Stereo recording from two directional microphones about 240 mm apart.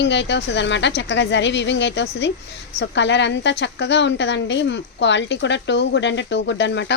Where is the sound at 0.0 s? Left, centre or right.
Left.